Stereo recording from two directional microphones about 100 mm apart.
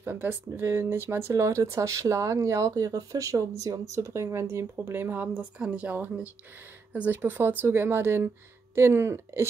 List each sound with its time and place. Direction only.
0.0 s speech: 25° right (ahead or behind)